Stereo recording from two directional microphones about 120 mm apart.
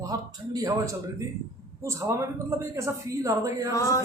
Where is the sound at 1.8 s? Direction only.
25° right (ahead or behind).